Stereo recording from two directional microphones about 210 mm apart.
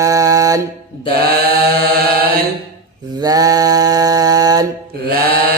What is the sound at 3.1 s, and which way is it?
Speech, 15° right (ahead or behind).